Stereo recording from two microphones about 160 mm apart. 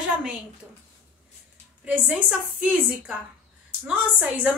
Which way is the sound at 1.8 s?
10° right (ahead or behind).